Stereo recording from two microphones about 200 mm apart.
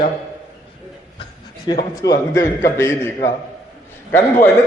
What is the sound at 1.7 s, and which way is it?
A man's voice, 20° left (ahead or behind).